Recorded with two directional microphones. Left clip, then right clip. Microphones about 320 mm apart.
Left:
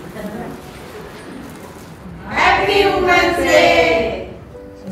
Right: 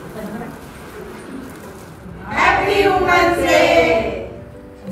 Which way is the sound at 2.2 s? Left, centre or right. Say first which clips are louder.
Left 1 dB; centre.